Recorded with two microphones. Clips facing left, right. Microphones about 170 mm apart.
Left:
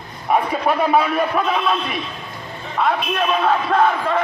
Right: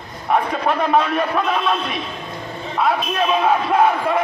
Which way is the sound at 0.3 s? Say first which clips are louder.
Left 1 dB; 10° left (ahead or behind).